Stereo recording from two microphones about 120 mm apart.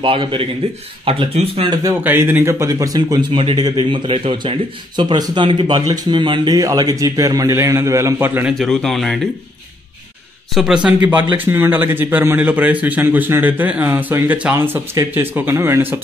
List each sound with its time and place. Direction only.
0.0 s speech: 45° right (ahead or behind)
1.7 s a man's voice: 30° right (ahead or behind)
2.0 s a man's voice: 15° right (ahead or behind)
8.5 s speech: centre (ahead or behind)
10.5 s a man's voice: 5° right (ahead or behind)